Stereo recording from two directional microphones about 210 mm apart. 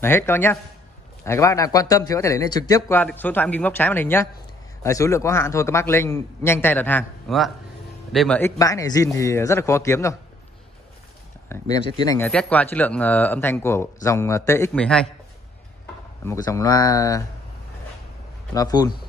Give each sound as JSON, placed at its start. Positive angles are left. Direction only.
{"t": 0.0, "sound": "speech", "side_deg": 10}
{"t": 11.4, "sound": "speech", "side_deg": 15}
{"t": 12.3, "sound": "speech", "side_deg": 5}
{"t": 16.3, "sound": "speech", "side_deg": 15}
{"t": 18.5, "sound": "speech", "side_deg": 20}